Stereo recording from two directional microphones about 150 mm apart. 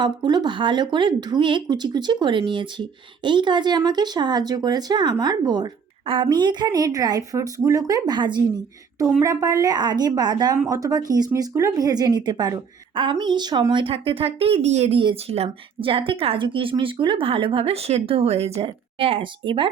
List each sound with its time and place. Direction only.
0.0 s speech: 30° right (ahead or behind)